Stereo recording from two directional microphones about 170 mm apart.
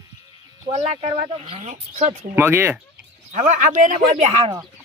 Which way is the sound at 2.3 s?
15° right (ahead or behind).